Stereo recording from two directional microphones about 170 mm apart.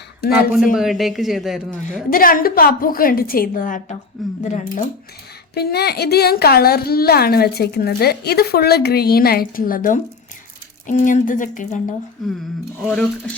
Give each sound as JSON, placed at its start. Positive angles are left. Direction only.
{"t": 0.3, "sound": "a man's voice", "side_deg": -5}
{"t": 2.0, "sound": "a woman's voice", "side_deg": 55}
{"t": 5.5, "sound": "a woman's voice", "side_deg": 70}
{"t": 11.0, "sound": "speech", "side_deg": 50}
{"t": 12.2, "sound": "a man's voice", "side_deg": 0}